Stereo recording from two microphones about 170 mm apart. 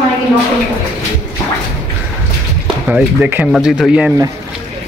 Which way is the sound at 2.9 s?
10° right (ahead or behind).